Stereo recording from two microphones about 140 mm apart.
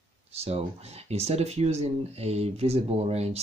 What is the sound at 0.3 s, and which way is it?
Speech, 45° right (ahead or behind).